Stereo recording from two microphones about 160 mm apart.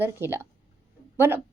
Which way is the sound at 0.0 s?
15° right (ahead or behind).